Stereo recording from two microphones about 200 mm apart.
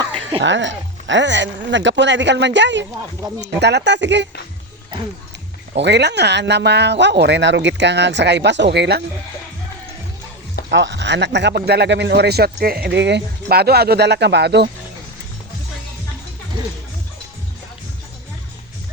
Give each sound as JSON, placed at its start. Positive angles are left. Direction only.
{"t": 0.4, "sound": "a man's voice", "side_deg": -65}
{"t": 5.7, "sound": "a man's voice", "side_deg": -60}
{"t": 10.7, "sound": "a man's voice", "side_deg": -65}